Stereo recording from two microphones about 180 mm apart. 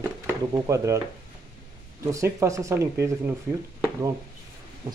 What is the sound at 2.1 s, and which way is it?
Speech, 15° right (ahead or behind).